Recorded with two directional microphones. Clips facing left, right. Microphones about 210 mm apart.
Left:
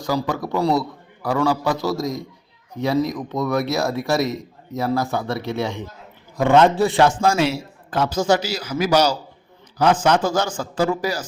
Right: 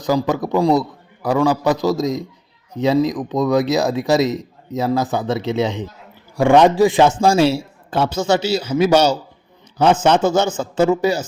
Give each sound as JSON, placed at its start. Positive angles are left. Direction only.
{"t": 0.0, "sound": "a man's voice", "side_deg": -20}